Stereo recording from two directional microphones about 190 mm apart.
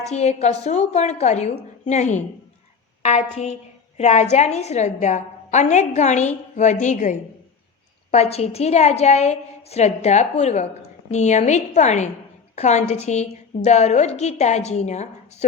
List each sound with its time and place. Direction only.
0.0 s a woman's voice: 35° left (ahead or behind)